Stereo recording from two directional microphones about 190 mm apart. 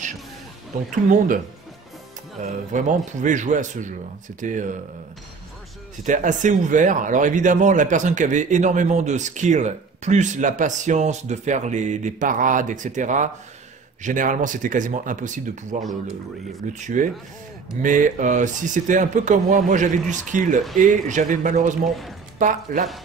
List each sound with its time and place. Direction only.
1.1 s speech: 45° right (ahead or behind)
6.0 s speech: 40° right (ahead or behind)
15.8 s speech: centre (ahead or behind)
16.7 s speech: 40° right (ahead or behind)